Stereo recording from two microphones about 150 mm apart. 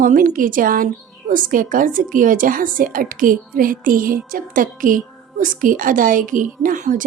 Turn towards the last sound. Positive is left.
turn(degrees=-60)  # may be behind; listen again after turning